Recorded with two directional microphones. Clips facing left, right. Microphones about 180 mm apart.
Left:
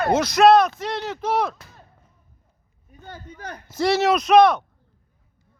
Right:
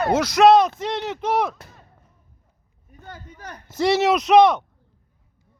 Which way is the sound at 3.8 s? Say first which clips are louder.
Right 1 dB; 20° right (ahead or behind).